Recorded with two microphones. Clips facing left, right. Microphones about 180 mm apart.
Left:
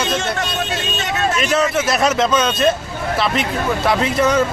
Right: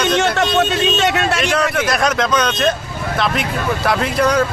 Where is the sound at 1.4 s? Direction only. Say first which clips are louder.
Even; 5° left (ahead or behind).